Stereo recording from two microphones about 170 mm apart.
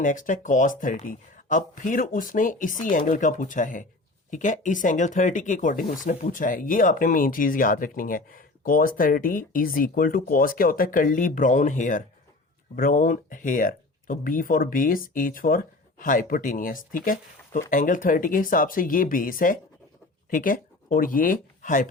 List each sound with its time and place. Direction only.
0.0 s speech: 50° left (ahead or behind)